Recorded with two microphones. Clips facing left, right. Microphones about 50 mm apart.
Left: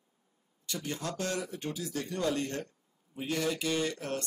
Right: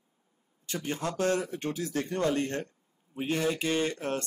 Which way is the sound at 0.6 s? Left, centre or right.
Right.